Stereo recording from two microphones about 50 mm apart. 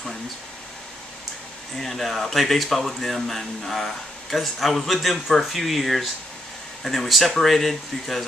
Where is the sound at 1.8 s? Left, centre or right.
Centre.